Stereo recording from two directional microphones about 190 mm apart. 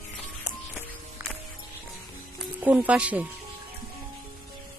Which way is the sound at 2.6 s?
10° right (ahead or behind).